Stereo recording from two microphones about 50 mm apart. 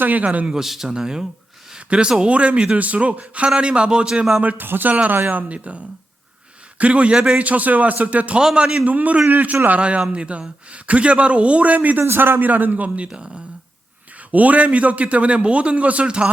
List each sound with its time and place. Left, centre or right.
0.0 s a man's voice: right
0.5 s a man's voice: centre
4.4 s a man's voice: right
8.4 s a man's voice: centre
8.9 s a man's voice: right
12.0 s a man's voice: right
12.4 s a man's voice: right
13.1 s a man's voice: centre
14.3 s a man's voice: right